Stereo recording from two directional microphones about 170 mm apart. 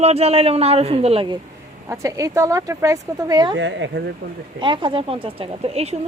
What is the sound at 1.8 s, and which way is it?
Speech, 15° right (ahead or behind).